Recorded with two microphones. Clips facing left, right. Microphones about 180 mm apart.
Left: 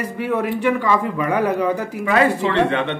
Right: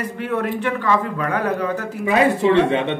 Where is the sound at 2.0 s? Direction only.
20° right (ahead or behind).